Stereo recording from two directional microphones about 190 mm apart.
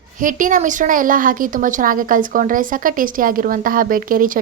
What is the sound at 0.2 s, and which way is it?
A woman's voice, 45° right (ahead or behind).